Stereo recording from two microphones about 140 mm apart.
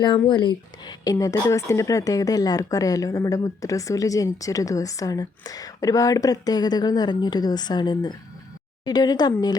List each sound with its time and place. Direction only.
0.0 s speech: 35° left (ahead or behind)